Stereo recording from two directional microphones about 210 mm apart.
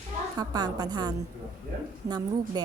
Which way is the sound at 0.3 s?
20° right (ahead or behind).